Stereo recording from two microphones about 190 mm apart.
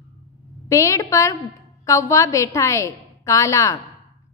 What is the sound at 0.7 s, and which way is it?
A woman's voice, 15° left (ahead or behind).